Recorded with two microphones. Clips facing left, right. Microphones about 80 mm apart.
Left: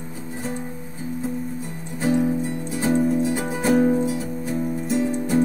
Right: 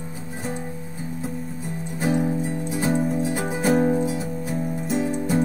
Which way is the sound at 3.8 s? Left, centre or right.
Centre.